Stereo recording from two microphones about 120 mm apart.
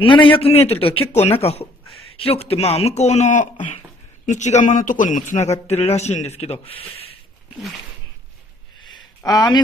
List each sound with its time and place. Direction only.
0.0 s speech: 45° left (ahead or behind); by 5.5 s 90° left
5.7 s speech: 65° left (ahead or behind)
8.8 s a sound: 35° left (ahead or behind)